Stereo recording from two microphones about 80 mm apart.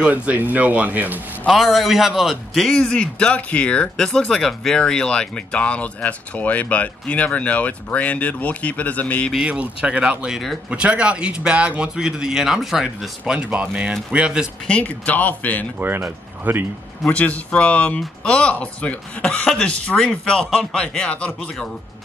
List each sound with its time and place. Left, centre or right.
0.0 s speech: centre
1.5 s a man's voice: centre
9.3 s speech: centre
14.7 s speech: centre
15.8 s speech: right
17.2 s a man's voice: centre